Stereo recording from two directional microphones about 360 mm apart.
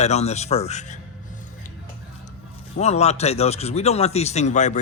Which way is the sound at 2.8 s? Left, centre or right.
Centre.